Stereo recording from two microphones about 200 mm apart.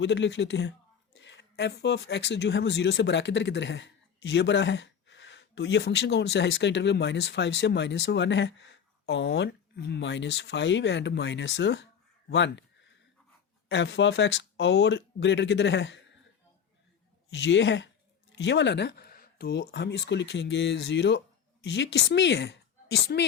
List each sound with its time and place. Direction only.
0.0 s speech: 60° left (ahead or behind)
13.7 s speech: 60° left (ahead or behind)
17.3 s a woman's voice: 65° left (ahead or behind)